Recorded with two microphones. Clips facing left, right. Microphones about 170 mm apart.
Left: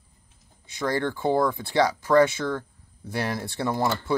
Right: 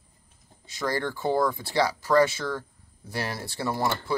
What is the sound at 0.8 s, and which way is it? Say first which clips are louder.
Speech: left 3 dB; 20° left (ahead or behind).